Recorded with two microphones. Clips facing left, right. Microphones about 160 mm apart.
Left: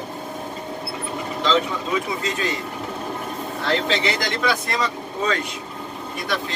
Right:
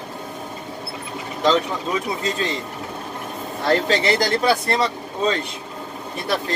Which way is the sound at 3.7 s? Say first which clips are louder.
Right 4 dB; 40° right (ahead or behind).